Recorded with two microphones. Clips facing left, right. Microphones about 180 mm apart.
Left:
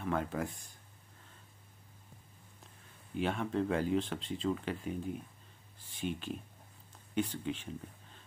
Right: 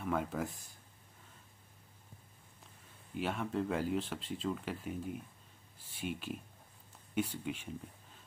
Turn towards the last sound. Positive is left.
turn(degrees=-10)  # may be behind; listen again after turning